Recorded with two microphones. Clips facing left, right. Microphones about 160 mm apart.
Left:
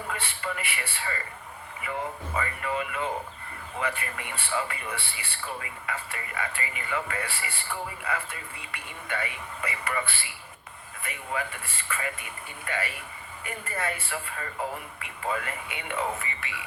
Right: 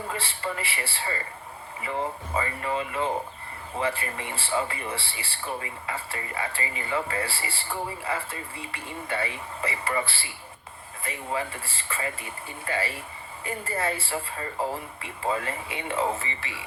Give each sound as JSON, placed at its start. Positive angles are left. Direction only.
{"t": 0.1, "sound": "speech", "side_deg": -30}
{"t": 2.3, "sound": "speech", "side_deg": -30}